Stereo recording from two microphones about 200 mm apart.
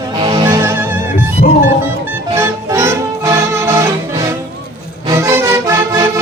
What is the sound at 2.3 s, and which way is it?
Music, 15° right (ahead or behind).